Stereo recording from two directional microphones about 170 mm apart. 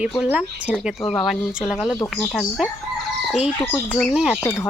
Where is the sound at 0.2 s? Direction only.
5° right (ahead or behind).